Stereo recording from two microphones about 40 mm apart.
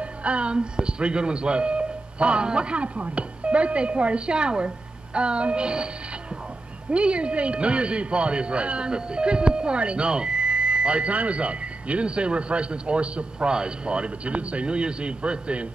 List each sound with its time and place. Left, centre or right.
0.0 s speech: right
6.9 s a man's voice: right